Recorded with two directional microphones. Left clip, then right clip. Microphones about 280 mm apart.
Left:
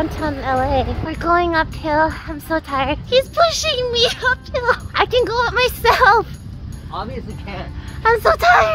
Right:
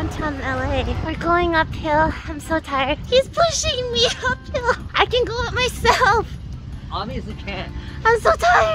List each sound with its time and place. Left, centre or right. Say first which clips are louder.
0.2 s a child's voice: left 4 dB; centre
3.1 s a child's voice: left 3 dB; left
8.0 s speech: left 2 dB; centre